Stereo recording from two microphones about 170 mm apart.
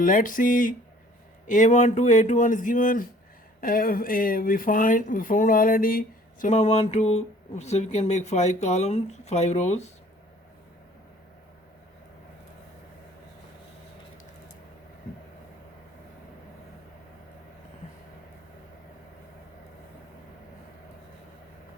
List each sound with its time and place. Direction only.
0.0 s speech: 55° left (ahead or behind)